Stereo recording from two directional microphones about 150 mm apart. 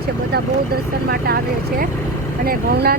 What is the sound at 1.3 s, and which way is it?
Speech, 90° right.